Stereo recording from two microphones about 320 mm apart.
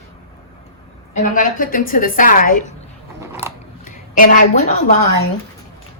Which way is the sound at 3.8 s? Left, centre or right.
Left.